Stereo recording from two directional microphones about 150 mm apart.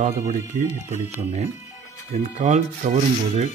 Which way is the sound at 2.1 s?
50° right (ahead or behind).